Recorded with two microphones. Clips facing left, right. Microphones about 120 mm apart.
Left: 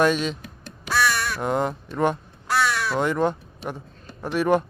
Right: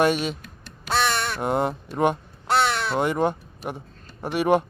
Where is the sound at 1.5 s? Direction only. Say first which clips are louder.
Even; 55° right (ahead or behind).